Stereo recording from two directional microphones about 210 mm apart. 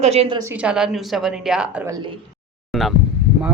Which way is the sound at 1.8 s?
20° right (ahead or behind).